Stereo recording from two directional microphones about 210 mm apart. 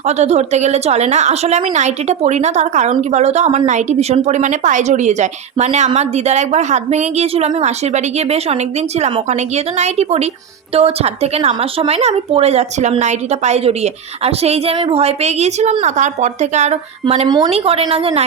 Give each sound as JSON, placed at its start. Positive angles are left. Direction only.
{"t": 0.2, "sound": "speech", "side_deg": -30}
{"t": 9.7, "sound": "speech", "side_deg": -30}
{"t": 17.2, "sound": "a woman's voice", "side_deg": -20}